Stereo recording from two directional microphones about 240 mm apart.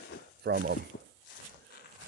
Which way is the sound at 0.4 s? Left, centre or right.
Right.